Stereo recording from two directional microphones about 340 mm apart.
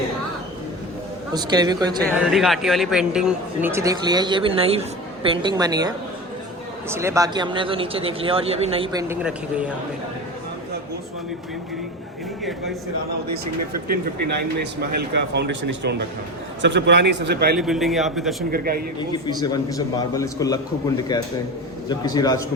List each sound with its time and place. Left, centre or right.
1.3 s speech: centre
2.0 s speech: centre
14.3 s a man's voice: right
17.6 s a man's voice: centre
18.5 s a man's voice: right
19.4 s a man's voice: centre